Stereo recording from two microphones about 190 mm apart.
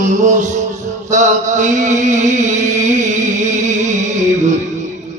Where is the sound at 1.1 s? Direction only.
40° right (ahead or behind).